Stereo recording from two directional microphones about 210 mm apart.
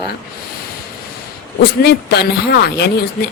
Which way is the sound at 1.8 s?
50° left (ahead or behind).